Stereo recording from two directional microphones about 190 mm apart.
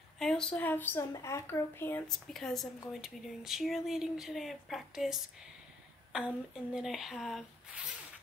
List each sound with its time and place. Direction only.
0.2 s speech: 5° left (ahead or behind)